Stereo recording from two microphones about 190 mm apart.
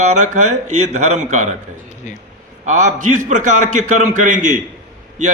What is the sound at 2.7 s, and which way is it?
A man's voice, 40° right (ahead or behind).